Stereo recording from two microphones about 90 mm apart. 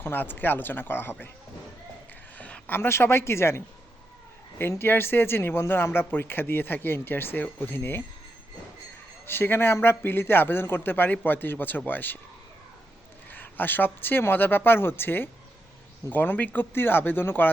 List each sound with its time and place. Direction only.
0.0 s speech: 25° left (ahead or behind)
2.4 s a woman's voice: 20° left (ahead or behind)
9.2 s speech: 25° left (ahead or behind)
13.3 s speech: 20° left (ahead or behind)